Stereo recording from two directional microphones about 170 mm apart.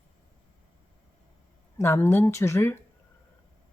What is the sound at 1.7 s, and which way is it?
Speech, 15° left (ahead or behind).